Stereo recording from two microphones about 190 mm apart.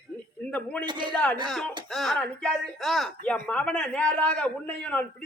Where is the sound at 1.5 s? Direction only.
Centre (ahead or behind).